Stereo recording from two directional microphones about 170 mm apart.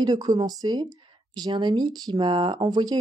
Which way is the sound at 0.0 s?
25° right (ahead or behind).